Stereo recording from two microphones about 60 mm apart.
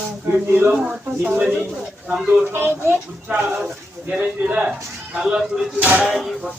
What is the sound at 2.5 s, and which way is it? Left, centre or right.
Speech, right.